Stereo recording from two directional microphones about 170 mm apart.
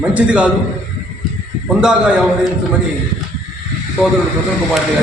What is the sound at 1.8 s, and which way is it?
Speech, 5° right (ahead or behind).